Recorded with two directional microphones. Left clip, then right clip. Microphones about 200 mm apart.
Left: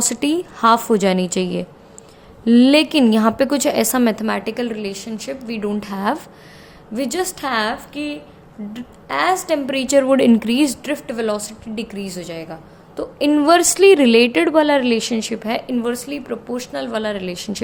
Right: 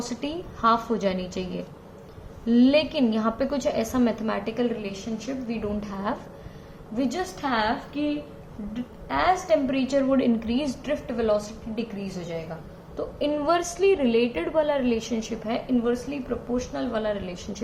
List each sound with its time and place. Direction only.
0.1 s a woman's voice: 55° left (ahead or behind)